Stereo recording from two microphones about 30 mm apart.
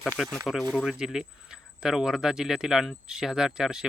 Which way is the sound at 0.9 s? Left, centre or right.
Right.